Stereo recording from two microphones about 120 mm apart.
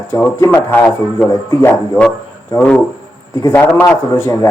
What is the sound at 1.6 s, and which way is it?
Speech, 15° left (ahead or behind).